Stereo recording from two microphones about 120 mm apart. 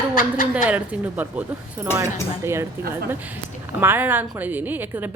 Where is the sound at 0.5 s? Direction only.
10° right (ahead or behind).